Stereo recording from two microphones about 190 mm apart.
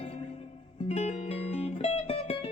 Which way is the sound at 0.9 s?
35° left (ahead or behind).